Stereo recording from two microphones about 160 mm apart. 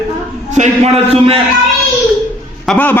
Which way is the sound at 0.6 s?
45° right (ahead or behind).